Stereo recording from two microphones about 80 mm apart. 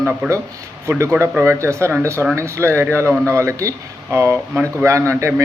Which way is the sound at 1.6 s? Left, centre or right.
Right.